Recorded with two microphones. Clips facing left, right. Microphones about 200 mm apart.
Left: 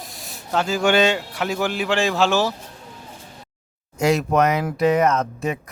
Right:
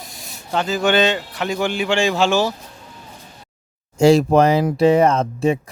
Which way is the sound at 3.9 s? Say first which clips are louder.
Right 6 dB; 30° right (ahead or behind).